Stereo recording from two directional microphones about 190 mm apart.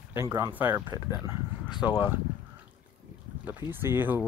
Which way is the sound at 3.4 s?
10° right (ahead or behind).